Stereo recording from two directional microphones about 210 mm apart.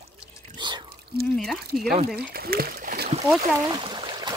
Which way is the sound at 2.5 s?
45° right (ahead or behind).